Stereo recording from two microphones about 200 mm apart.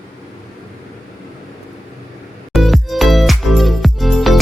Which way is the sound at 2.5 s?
Centre (ahead or behind).